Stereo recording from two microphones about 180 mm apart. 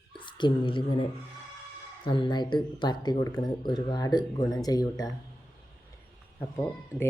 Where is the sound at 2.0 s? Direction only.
25° left (ahead or behind).